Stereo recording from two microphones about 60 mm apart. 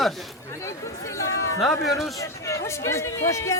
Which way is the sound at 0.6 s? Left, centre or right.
Left.